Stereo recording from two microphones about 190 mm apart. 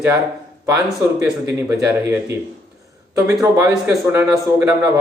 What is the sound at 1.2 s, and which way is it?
Speech, 15° right (ahead or behind).